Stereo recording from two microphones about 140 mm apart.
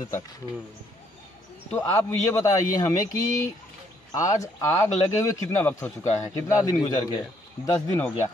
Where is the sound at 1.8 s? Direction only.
20° left (ahead or behind).